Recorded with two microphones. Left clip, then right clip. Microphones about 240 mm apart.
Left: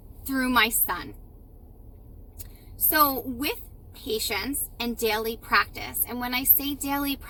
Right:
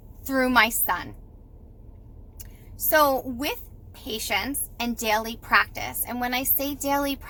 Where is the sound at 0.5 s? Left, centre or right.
Centre.